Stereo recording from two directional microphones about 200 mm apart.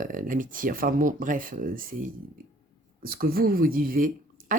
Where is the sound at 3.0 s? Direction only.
50° right (ahead or behind).